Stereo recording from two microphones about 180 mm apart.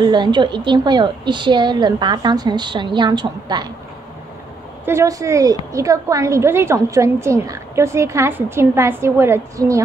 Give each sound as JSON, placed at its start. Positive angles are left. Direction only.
{"t": 0.0, "sound": "a woman's voice", "side_deg": -25}
{"t": 4.8, "sound": "a woman's voice", "side_deg": -15}